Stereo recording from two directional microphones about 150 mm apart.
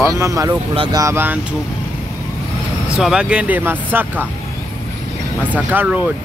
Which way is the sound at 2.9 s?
5° right (ahead or behind).